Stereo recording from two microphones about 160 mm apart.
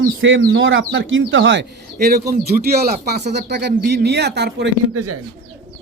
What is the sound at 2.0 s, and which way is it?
Speech, 70° right (ahead or behind).